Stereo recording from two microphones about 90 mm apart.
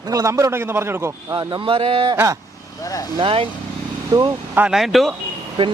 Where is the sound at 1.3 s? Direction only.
50° right (ahead or behind).